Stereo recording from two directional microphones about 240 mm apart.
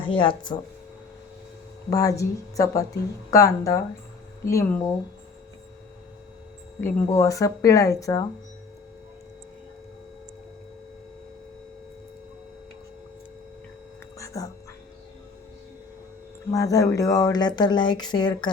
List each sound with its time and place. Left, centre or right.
0.0 s speech: left
1.9 s speech: centre
6.8 s speech: centre
14.2 s a sound: centre
16.5 s speech: centre